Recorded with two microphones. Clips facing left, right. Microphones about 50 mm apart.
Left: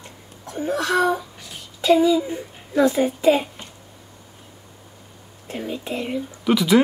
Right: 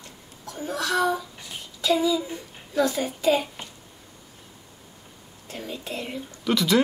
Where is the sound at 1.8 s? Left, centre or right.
Left.